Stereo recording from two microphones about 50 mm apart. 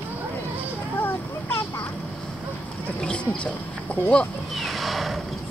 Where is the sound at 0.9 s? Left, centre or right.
Left.